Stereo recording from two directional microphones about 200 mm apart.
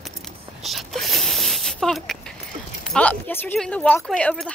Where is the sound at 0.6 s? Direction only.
Centre (ahead or behind).